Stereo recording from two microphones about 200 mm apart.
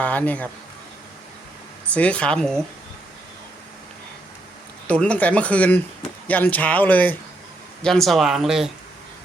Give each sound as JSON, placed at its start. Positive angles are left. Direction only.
{"t": 0.0, "sound": "speech", "side_deg": 5}
{"t": 1.9, "sound": "speech", "side_deg": 5}
{"t": 4.9, "sound": "speech", "side_deg": 5}